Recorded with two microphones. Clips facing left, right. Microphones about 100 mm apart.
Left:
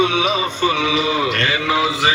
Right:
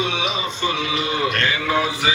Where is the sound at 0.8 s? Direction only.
90° left.